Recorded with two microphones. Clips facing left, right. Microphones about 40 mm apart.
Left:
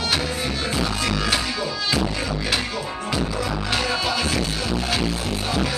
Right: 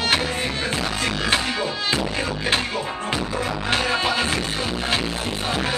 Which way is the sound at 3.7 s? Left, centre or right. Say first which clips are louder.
Right 3 dB; right.